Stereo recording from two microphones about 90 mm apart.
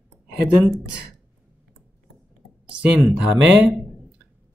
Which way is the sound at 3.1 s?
20° right (ahead or behind).